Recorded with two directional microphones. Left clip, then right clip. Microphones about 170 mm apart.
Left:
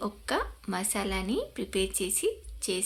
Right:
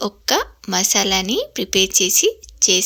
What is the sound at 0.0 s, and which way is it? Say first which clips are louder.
A woman's voice: right 12 dB; 50° right (ahead or behind).